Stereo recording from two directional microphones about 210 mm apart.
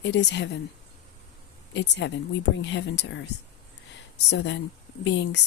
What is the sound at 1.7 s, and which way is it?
Speech, 55° left (ahead or behind).